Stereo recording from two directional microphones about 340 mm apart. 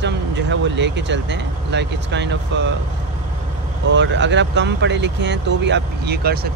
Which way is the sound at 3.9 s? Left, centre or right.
Right.